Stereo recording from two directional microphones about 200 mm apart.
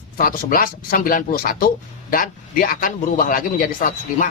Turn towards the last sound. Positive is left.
turn(degrees=40)  # may be behind; listen again after turning